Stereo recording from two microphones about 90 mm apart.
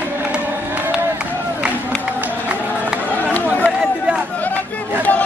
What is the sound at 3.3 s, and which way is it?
Chatter, 15° left (ahead or behind).